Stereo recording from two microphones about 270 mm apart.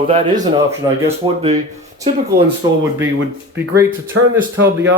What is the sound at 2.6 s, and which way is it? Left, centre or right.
Speech, centre.